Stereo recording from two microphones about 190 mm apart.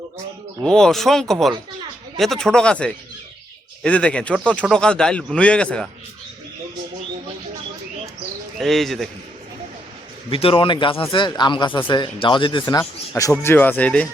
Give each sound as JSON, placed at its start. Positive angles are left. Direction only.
{"t": 0.6, "sound": "speech", "side_deg": 5}
{"t": 8.5, "sound": "speech", "side_deg": 0}
{"t": 10.2, "sound": "speech", "side_deg": 30}